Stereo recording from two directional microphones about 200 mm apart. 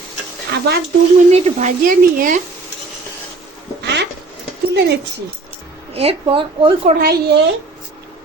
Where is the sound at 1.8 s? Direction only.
45° right (ahead or behind).